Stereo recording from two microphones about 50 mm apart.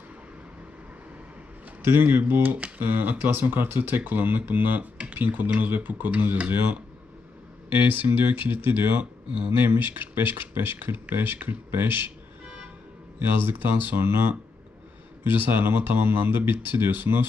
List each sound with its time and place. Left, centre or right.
1.8 s speech: right
13.1 s speech: right